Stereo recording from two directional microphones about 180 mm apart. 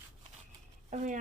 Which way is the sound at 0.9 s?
45° right (ahead or behind).